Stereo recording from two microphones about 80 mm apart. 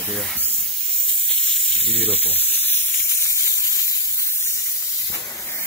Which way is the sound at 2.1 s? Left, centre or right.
Left.